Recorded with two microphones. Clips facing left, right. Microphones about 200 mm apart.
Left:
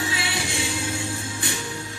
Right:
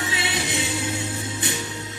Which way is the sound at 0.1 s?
20° right (ahead or behind).